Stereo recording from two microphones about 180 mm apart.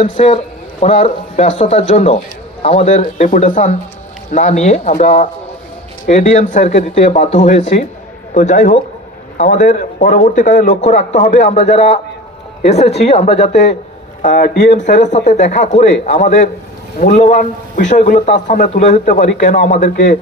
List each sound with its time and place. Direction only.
0.0 s speech: 30° left (ahead or behind)
14.2 s speech: 50° left (ahead or behind)